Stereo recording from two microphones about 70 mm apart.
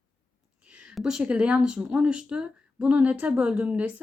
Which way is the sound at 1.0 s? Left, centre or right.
Centre.